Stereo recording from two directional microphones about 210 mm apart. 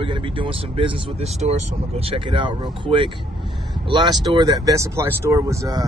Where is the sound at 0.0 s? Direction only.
25° right (ahead or behind).